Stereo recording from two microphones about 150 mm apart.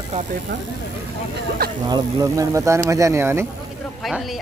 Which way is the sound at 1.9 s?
20° right (ahead or behind).